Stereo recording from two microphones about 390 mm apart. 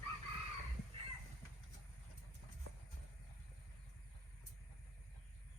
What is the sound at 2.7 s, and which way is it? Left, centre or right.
Clip-clop, right.